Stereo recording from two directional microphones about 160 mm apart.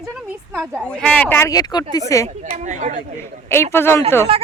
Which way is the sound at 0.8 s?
5° left (ahead or behind).